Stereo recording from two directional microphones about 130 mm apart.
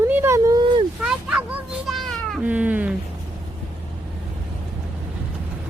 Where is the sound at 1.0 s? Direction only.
5° right (ahead or behind).